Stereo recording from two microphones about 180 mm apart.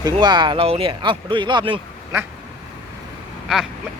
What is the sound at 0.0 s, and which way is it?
Speech, 25° right (ahead or behind).